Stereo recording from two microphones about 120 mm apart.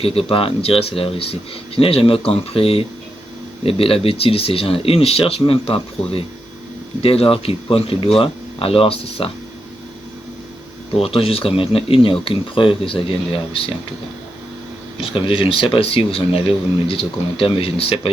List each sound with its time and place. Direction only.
0.0 s speech: 50° left (ahead or behind)
11.0 s speech: 55° left (ahead or behind)
15.0 s speech: 45° left (ahead or behind)